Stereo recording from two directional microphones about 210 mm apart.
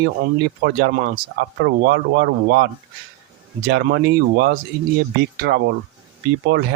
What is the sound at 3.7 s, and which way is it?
Speech, 50° right (ahead or behind).